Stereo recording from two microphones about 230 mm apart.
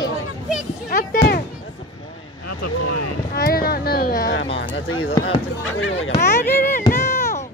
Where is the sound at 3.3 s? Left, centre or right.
Left.